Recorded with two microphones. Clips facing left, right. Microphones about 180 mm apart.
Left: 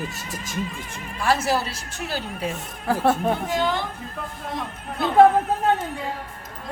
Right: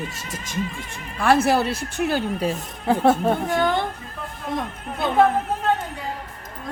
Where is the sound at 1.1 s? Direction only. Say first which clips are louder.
Right 4 dB; 55° right (ahead or behind).